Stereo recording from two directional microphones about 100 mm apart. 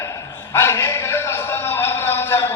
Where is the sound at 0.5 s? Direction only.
25° left (ahead or behind).